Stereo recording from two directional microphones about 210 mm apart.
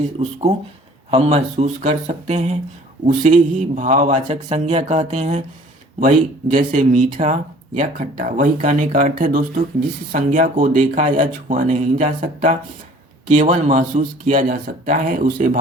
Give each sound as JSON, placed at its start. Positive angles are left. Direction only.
{"t": 0.2, "sound": "speech", "side_deg": -30}